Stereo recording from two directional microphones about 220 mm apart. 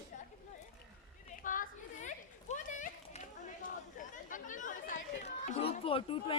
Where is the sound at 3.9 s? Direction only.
35° left (ahead or behind).